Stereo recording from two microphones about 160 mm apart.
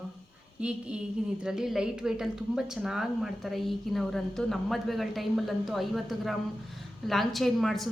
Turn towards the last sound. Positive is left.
turn(degrees=0)  # may be behind; listen again after turning